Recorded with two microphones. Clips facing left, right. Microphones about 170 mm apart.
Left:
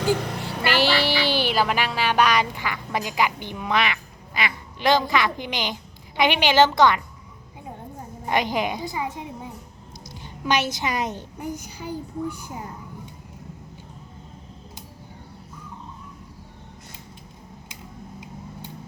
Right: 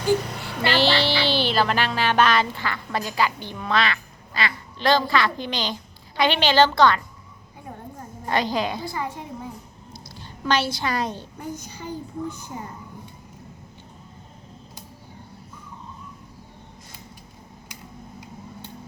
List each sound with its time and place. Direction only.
0.7 s speech: 10° left (ahead or behind)
8.2 s speech: 15° left (ahead or behind)